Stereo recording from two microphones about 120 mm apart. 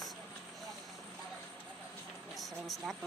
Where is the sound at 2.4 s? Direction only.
Centre (ahead or behind).